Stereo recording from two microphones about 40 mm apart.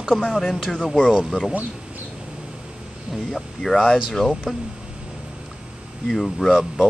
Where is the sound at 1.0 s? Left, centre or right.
Right.